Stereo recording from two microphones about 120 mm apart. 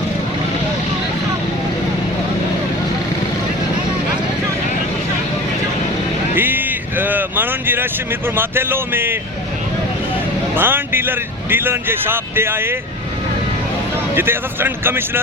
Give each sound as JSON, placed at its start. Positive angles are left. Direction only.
{"t": 6.3, "sound": "vehicle", "side_deg": -15}
{"t": 8.4, "sound": "speech", "side_deg": -20}
{"t": 10.5, "sound": "a man's voice", "side_deg": -15}
{"t": 14.2, "sound": "a man's voice", "side_deg": -20}